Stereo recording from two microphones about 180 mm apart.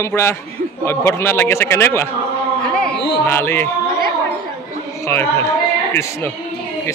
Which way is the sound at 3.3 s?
15° left (ahead or behind).